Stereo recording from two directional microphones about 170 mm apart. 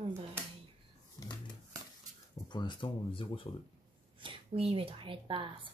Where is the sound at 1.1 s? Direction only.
25° left (ahead or behind).